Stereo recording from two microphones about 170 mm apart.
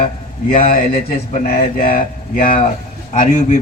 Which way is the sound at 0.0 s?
55° left (ahead or behind).